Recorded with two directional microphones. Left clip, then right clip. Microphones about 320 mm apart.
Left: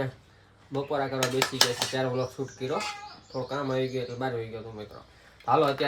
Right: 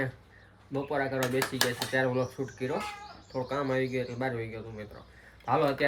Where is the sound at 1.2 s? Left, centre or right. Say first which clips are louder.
Left 4 dB; left.